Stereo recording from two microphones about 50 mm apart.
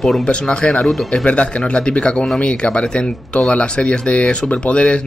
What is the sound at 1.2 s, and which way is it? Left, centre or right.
Speech, left.